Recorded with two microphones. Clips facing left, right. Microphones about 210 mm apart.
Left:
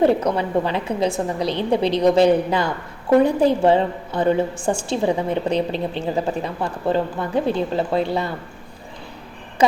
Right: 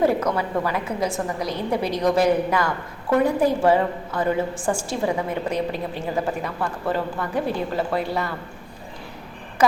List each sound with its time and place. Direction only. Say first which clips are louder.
0.0 s a woman's voice: left 3 dB; 30° left (ahead or behind)